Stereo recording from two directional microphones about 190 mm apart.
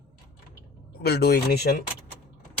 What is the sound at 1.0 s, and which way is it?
Speech, 60° left (ahead or behind).